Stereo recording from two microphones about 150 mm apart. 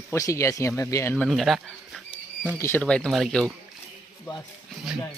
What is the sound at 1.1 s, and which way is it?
Speech, 5° left (ahead or behind).